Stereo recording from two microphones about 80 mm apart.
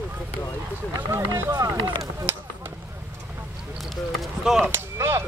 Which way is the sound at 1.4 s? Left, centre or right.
Right.